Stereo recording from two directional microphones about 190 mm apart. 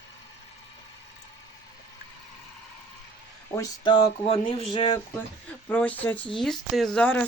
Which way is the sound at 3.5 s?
20° left (ahead or behind).